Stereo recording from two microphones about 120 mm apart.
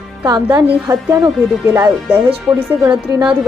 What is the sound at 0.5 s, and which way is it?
Speech, 30° right (ahead or behind).